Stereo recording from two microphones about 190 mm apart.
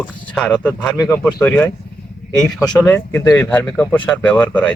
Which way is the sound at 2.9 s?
10° left (ahead or behind).